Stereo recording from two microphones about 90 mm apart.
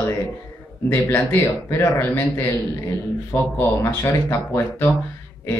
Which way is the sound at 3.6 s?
30° left (ahead or behind).